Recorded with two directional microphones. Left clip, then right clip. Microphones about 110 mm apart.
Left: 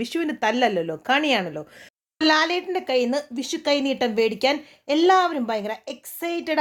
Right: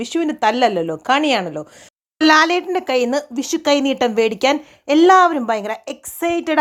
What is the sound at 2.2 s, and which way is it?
Speech, 40° right (ahead or behind).